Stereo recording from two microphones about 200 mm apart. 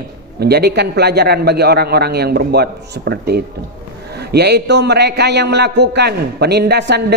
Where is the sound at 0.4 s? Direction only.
55° right (ahead or behind).